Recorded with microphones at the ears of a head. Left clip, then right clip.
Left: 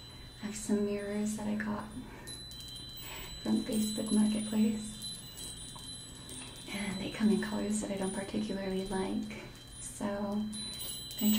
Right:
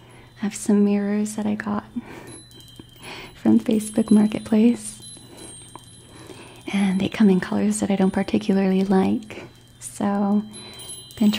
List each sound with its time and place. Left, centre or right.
0.4 s speech: right
6.6 s speech: right